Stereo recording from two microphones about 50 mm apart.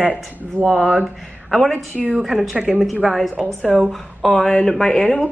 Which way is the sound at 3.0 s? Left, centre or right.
Centre.